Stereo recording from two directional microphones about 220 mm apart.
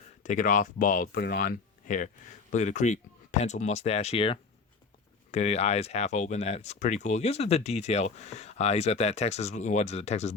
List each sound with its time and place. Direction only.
0.2 s speech: 35° left (ahead or behind)